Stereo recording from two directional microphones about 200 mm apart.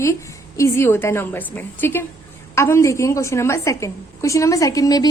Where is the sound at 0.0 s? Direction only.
15° left (ahead or behind).